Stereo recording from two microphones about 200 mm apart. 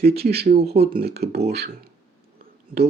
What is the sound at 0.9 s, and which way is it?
Speech, 50° right (ahead or behind).